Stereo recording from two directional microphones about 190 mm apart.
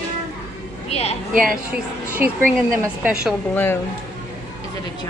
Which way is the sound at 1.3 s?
45° right (ahead or behind).